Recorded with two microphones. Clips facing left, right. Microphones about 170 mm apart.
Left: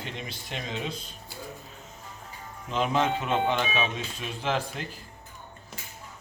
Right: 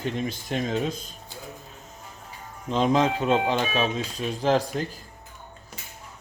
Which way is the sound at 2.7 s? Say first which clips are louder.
Right 4 dB; 35° right (ahead or behind).